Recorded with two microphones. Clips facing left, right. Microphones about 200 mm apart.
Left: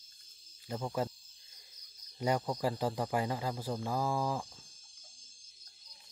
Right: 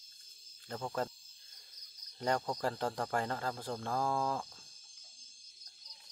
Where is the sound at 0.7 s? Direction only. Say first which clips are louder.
Left 2 dB; 10° left (ahead or behind).